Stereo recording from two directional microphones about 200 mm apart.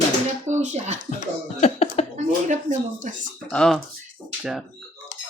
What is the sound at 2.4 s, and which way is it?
Speech, 35° right (ahead or behind).